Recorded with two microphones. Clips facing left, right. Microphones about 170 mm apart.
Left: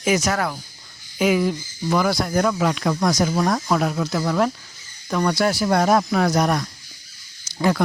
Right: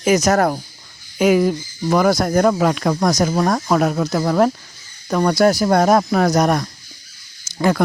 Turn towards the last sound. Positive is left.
turn(degrees=-55)  # may be behind; listen again after turning